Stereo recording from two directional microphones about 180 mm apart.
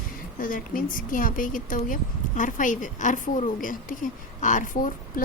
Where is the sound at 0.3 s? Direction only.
50° left (ahead or behind).